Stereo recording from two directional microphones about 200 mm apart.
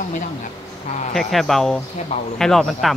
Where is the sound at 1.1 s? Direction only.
Centre (ahead or behind).